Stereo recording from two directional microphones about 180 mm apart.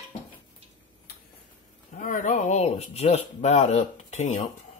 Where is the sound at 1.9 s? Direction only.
45° left (ahead or behind).